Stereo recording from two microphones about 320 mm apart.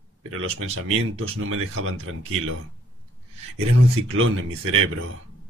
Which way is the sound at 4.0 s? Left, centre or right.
Right.